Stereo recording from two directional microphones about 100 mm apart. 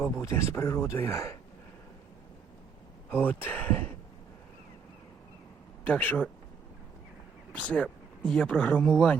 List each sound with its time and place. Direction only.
0.2 s speech: 30° left (ahead or behind)
3.1 s speech: 20° left (ahead or behind)
5.8 s speech: 15° left (ahead or behind)
7.5 s speech: 15° left (ahead or behind)